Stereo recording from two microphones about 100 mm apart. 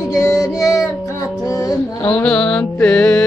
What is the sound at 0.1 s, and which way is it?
Child singing, 35° left (ahead or behind).